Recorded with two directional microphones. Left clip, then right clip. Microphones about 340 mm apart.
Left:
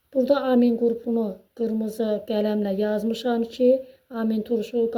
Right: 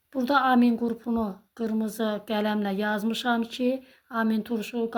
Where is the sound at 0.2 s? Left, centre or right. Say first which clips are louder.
Left 2 dB; centre.